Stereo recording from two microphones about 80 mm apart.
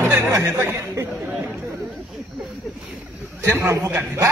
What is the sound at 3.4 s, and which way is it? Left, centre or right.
Speech, right.